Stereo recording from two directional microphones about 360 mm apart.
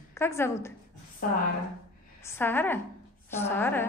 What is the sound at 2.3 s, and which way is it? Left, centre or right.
A woman's voice, centre.